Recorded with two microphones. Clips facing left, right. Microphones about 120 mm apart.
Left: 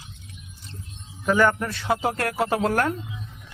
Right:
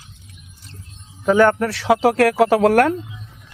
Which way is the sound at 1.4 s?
70° right (ahead or behind).